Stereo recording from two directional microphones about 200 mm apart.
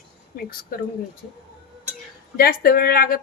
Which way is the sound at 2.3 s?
50° left (ahead or behind).